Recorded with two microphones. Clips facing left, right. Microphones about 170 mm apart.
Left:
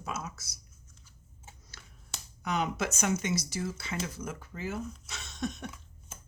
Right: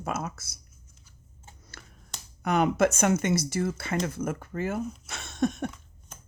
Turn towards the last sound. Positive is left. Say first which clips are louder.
# right 9 dB
turn(degrees=-55)  # may be behind; listen again after turning